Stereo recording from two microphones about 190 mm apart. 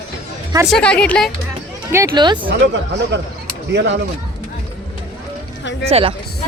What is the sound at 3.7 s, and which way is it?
Speech, 70° right (ahead or behind).